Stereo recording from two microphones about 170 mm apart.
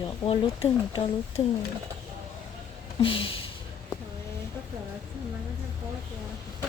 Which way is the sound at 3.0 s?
30° left (ahead or behind).